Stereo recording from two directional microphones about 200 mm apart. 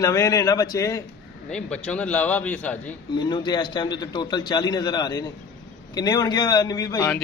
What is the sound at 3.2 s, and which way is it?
A man's voice, 20° left (ahead or behind).